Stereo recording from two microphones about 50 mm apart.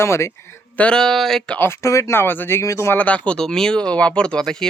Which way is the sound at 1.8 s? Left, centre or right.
Left.